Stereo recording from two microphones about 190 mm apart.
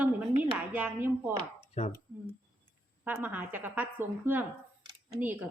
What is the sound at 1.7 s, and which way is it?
Speech, 35° left (ahead or behind).